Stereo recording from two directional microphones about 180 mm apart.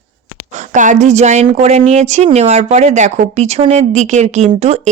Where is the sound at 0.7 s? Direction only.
45° right (ahead or behind).